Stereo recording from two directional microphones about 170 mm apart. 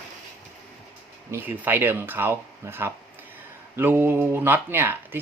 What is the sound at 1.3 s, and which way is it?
Speech, 10° right (ahead or behind).